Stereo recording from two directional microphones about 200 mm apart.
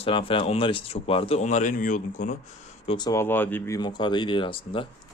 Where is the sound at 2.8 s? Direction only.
25° left (ahead or behind).